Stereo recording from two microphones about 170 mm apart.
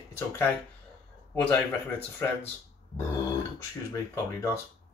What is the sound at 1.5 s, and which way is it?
Speech, 10° left (ahead or behind).